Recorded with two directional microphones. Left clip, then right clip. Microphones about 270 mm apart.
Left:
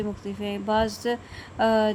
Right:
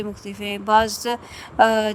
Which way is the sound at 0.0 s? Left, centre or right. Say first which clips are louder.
Right 2 dB; right.